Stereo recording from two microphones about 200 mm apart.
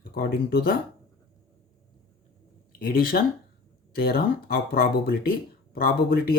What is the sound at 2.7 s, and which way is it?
Speech, 45° left (ahead or behind).